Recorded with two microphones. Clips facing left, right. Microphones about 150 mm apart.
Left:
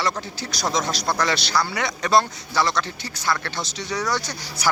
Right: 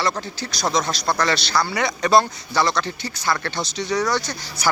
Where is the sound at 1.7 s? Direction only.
Centre (ahead or behind).